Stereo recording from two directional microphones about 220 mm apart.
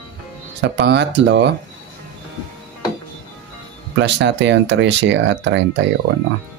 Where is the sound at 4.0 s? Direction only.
55° right (ahead or behind).